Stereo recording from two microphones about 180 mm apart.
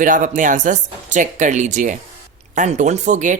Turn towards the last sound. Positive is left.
turn(degrees=-45)  # may be behind; listen again after turning